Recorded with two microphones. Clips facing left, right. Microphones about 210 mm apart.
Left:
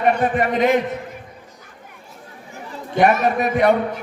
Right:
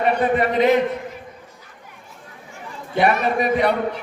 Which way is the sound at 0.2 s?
50° left (ahead or behind).